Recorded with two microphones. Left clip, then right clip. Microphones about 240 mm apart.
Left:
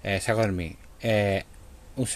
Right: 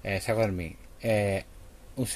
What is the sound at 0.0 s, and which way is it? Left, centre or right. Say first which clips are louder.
Speech: left 2 dB; centre.